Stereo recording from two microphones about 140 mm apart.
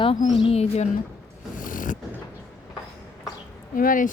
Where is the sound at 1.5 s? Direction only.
70° left (ahead or behind).